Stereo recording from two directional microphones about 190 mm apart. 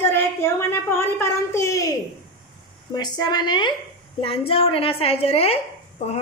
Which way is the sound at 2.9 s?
20° left (ahead or behind).